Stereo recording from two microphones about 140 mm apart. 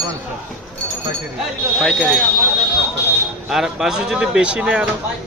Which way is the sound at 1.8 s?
5° right (ahead or behind).